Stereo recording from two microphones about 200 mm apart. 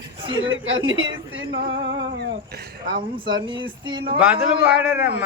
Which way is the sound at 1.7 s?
65° right (ahead or behind).